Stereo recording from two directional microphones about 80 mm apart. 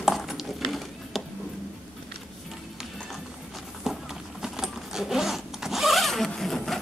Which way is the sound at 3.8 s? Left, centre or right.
Centre.